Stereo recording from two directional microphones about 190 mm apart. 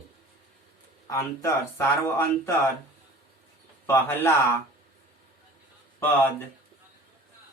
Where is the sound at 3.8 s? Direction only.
15° left (ahead or behind).